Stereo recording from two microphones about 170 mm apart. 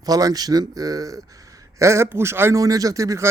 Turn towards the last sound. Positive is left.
turn(degrees=-20)  # may be behind; listen again after turning